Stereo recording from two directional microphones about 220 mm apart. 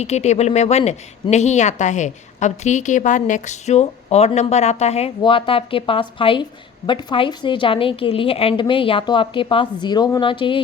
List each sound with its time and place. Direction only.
0.0 s a woman's voice: 30° left (ahead or behind)